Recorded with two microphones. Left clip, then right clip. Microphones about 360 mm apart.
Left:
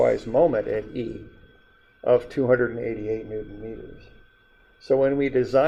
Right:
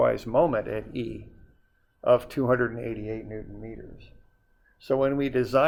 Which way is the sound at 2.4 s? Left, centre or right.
Right.